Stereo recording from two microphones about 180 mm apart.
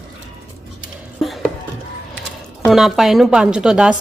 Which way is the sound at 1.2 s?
Centre (ahead or behind).